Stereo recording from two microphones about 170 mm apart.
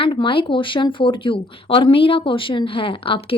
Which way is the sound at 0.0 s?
30° left (ahead or behind).